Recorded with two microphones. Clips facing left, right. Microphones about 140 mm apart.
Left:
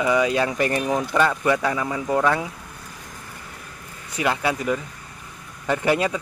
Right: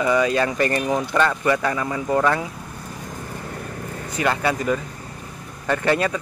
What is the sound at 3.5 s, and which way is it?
Vehicle, 55° right (ahead or behind).